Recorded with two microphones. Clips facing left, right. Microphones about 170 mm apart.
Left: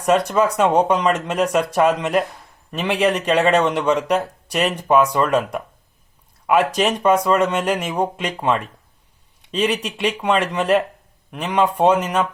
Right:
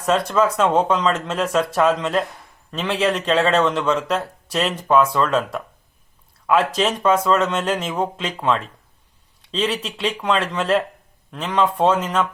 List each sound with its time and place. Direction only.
0.0 s a man's voice: 15° left (ahead or behind)